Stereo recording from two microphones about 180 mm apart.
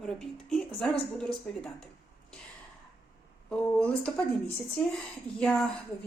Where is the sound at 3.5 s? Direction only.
5° left (ahead or behind).